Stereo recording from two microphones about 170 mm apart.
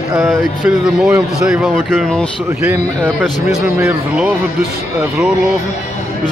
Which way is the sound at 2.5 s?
15° right (ahead or behind).